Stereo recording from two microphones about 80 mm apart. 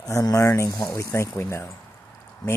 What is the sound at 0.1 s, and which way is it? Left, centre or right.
Speech, left.